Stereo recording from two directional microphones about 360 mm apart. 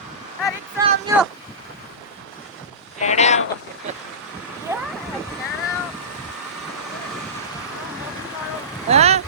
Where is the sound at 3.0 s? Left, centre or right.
Centre.